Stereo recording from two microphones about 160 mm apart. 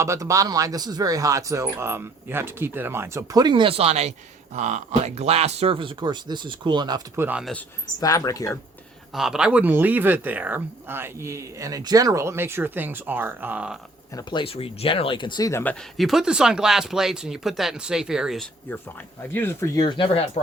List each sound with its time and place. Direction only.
0.0 s speech: 20° right (ahead or behind)
7.2 s speech: 10° right (ahead or behind)
8.0 s speech: 20° left (ahead or behind)
9.1 s speech: 5° right (ahead or behind)
14.2 s speech: 30° left (ahead or behind)
15.6 s speech: 5° left (ahead or behind)
18.7 s speech: 10° left (ahead or behind); by 20.2 s 30° left (ahead or behind)